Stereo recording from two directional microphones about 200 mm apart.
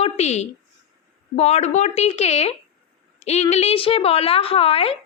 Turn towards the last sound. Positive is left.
turn(degrees=30)  # may be behind; listen again after turning